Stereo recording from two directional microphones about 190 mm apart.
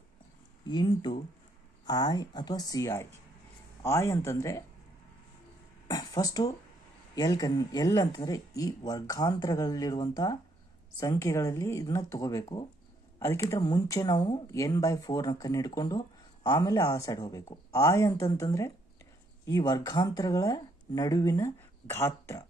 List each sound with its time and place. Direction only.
1.9 s speech: 20° left (ahead or behind)
5.9 s speech: 20° left (ahead or behind)